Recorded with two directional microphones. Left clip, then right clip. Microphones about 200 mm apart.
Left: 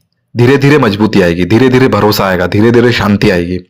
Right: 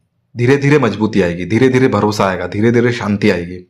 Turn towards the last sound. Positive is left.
turn(degrees=35)  # may be behind; listen again after turning